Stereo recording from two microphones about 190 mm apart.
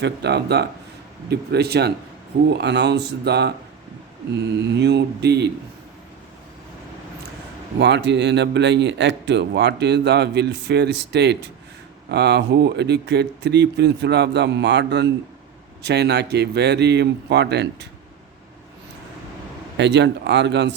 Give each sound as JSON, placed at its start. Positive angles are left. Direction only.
{"t": 0.0, "sound": "speech", "side_deg": -60}
{"t": 4.7, "sound": "speech", "side_deg": -65}
{"t": 7.8, "sound": "speech", "side_deg": -65}
{"t": 19.7, "sound": "speech", "side_deg": -65}